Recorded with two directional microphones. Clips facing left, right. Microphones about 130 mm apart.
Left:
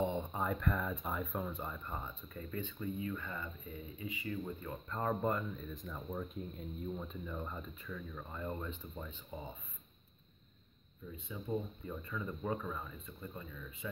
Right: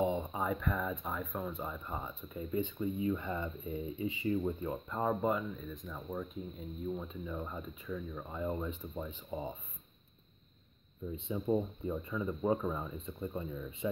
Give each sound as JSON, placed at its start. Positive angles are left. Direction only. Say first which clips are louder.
{"t": 0.0, "sound": "speech", "louder": "right 3 dB", "side_deg": -10}
{"t": 4.8, "sound": "speech", "louder": "right 2 dB", "side_deg": -10}
{"t": 11.1, "sound": "speech", "louder": "right 8 dB", "side_deg": -25}